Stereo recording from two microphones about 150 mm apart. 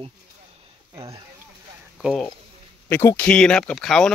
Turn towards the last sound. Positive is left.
turn(degrees=5)  # may be behind; listen again after turning